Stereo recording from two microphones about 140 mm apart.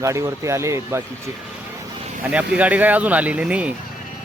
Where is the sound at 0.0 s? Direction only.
20° right (ahead or behind).